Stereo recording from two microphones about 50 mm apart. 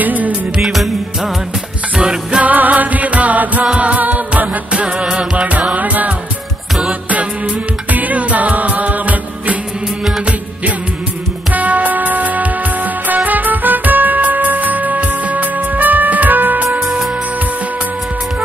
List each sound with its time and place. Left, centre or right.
0.0 s music: right
0.6 s music: centre
2.0 s music: centre
2.4 s music: right
4.7 s music: right
6.9 s music: right
11.5 s music: right